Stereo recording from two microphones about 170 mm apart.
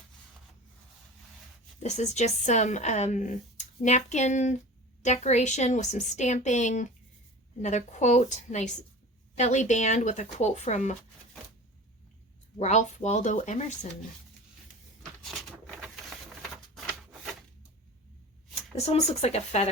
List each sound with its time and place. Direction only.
1.8 s speech: 40° left (ahead or behind)
12.5 s speech: 45° left (ahead or behind)
15.2 s a sound: centre (ahead or behind)
18.9 s speech: 40° left (ahead or behind)